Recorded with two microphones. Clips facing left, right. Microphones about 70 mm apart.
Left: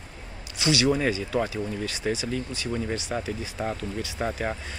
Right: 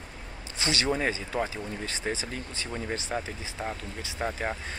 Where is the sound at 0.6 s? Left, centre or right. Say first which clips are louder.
Left 5 dB; right.